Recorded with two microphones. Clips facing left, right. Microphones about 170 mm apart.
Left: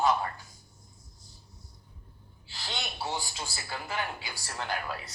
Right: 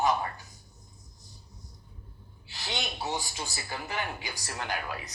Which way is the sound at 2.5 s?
20° right (ahead or behind).